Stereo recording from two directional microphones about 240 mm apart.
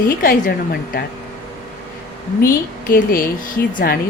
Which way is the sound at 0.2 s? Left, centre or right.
Left.